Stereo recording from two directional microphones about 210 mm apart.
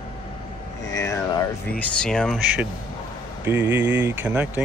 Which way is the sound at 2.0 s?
5° left (ahead or behind).